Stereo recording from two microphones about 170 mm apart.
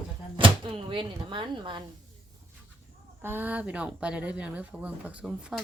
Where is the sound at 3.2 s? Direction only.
10° right (ahead or behind).